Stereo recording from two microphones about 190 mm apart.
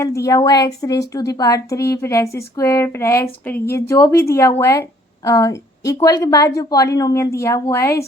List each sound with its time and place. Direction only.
0.0 s a woman's voice: 15° left (ahead or behind)